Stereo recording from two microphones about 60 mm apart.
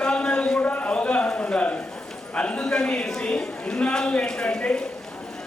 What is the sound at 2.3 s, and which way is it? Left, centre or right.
A man's voice, centre.